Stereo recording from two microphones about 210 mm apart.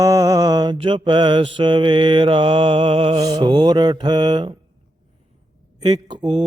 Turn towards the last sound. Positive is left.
turn(degrees=-20)  # may be behind; listen again after turning